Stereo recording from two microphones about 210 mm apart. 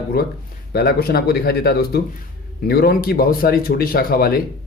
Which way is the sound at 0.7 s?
50° left (ahead or behind).